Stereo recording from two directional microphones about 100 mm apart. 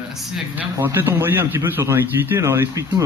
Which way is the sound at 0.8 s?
20° right (ahead or behind).